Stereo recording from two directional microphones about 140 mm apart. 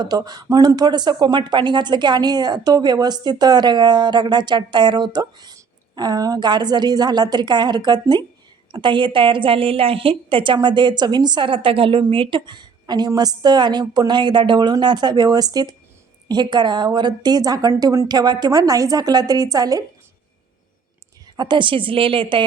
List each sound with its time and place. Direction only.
0.0 s a woman's voice: 30° right (ahead or behind)
21.3 s speech: 35° right (ahead or behind)